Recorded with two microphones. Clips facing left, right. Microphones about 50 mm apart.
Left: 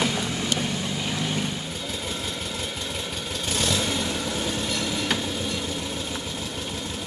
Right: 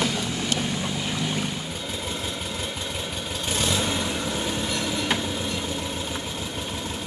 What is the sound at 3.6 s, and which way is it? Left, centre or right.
Vehicle, centre.